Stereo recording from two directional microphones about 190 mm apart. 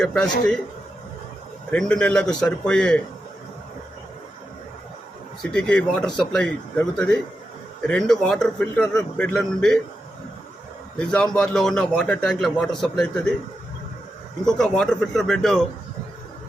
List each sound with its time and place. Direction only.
0.0 s a man's voice: 5° left (ahead or behind)
1.7 s a man's voice: 5° left (ahead or behind)
5.4 s a man's voice: 5° left (ahead or behind)
10.9 s a man's voice: 5° left (ahead or behind)
14.4 s a man's voice: 5° left (ahead or behind)